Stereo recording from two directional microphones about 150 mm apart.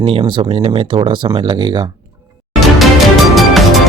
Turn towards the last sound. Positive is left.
turn(degrees=0)  # may be behind; listen again after turning